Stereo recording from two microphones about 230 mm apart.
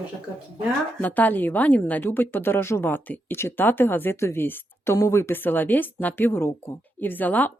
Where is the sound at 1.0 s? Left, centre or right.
Centre.